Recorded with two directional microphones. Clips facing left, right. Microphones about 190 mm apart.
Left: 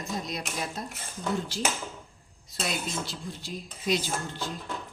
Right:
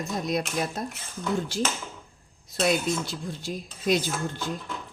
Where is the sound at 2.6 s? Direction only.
50° right (ahead or behind).